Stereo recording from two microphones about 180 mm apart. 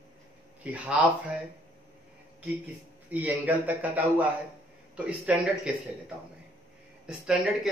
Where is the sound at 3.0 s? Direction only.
10° right (ahead or behind).